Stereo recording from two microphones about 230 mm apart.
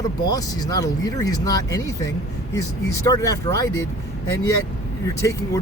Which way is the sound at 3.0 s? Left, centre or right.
Centre.